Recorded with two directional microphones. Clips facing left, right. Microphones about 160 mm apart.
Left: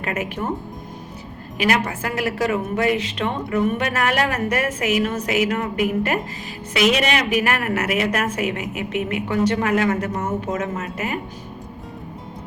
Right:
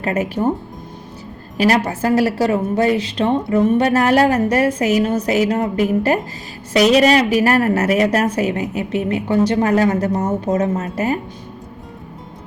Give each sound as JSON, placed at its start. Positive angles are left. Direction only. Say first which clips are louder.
{"t": 0.0, "sound": "a woman's voice", "louder": "right 7 dB", "side_deg": -35}
{"t": 1.5, "sound": "a woman's voice", "louder": "right 5 dB", "side_deg": -35}